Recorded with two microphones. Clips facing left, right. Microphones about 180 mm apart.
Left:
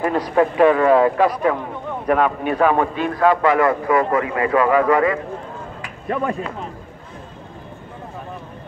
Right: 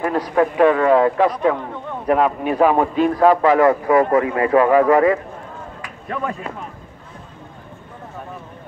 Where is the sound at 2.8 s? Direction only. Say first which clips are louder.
Right 3 dB; 35° right (ahead or behind).